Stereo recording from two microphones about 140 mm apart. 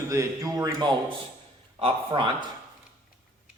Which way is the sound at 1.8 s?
40° right (ahead or behind).